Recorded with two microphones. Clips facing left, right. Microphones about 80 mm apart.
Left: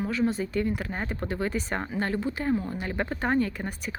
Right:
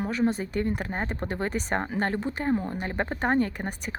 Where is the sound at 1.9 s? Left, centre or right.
Right.